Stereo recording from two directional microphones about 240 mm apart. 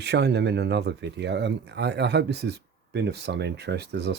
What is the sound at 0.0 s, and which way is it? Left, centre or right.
Speech, right.